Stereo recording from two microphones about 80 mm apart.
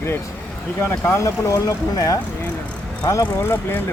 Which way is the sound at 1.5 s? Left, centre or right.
Left.